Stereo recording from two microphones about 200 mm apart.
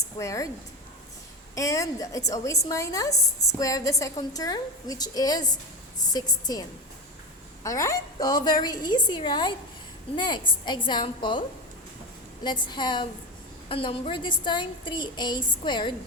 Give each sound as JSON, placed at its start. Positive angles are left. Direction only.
{"t": 0.2, "sound": "a woman's voice", "side_deg": 15}
{"t": 1.5, "sound": "a woman's voice", "side_deg": 15}
{"t": 12.4, "sound": "a woman's voice", "side_deg": 20}